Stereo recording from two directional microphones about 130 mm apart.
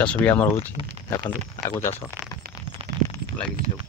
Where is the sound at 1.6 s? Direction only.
20° left (ahead or behind).